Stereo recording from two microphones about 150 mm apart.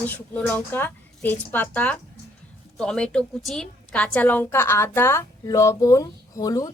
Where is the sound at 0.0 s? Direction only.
10° left (ahead or behind).